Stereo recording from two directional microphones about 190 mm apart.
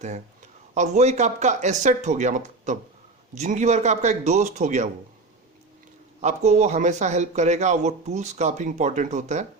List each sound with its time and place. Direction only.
0.7 s a man's voice: 35° right (ahead or behind)
6.2 s a man's voice: 40° right (ahead or behind)